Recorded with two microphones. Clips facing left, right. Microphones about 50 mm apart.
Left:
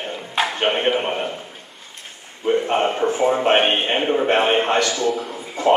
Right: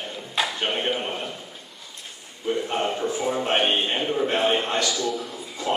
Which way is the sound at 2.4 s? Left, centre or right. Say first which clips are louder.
Left 6 dB; left.